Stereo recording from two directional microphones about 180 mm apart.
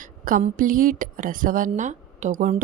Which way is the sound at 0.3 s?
50° right (ahead or behind).